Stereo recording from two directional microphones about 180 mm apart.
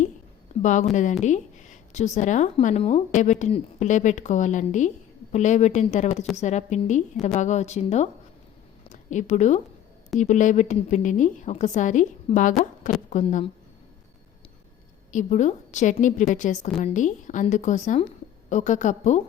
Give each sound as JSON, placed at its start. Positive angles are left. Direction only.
{"t": 0.6, "sound": "a woman's voice", "side_deg": 45}
{"t": 15.1, "sound": "a woman's voice", "side_deg": 40}